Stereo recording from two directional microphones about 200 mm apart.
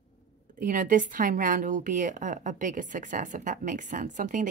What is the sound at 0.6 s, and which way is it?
A woman's voice, 40° right (ahead or behind).